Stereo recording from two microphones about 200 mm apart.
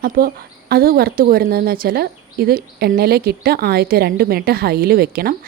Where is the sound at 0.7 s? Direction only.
50° right (ahead or behind).